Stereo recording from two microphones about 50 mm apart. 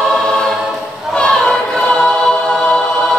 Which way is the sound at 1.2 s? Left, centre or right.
Centre.